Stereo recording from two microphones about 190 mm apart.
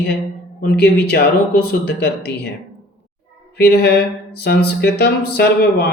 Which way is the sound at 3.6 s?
55° left (ahead or behind).